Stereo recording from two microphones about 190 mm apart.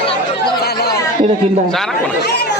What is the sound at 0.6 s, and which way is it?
Chatter, 55° left (ahead or behind).